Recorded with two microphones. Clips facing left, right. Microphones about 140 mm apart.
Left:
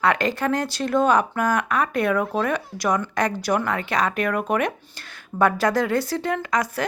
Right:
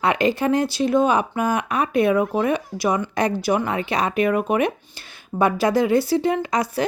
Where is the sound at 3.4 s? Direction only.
10° right (ahead or behind).